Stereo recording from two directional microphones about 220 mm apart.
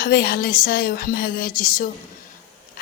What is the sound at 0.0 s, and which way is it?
A woman's voice, 45° left (ahead or behind).